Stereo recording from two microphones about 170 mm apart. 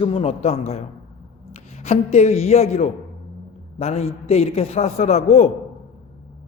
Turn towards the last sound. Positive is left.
turn(degrees=40)  # may be behind; listen again after turning